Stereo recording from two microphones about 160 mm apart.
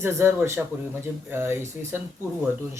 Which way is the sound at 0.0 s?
15° right (ahead or behind).